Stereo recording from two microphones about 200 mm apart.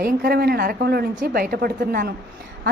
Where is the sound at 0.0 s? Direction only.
50° right (ahead or behind).